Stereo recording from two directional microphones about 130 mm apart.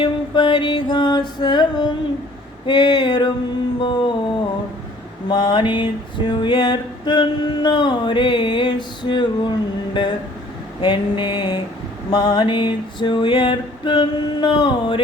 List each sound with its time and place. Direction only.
0.0 s music: 35° left (ahead or behind)
2.6 s male singing: 35° left (ahead or behind)
5.3 s male singing: 35° left (ahead or behind)